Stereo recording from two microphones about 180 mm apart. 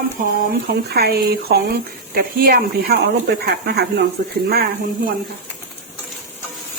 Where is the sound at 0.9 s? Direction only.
60° right (ahead or behind).